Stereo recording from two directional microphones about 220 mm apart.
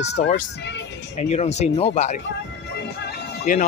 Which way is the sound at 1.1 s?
30° left (ahead or behind).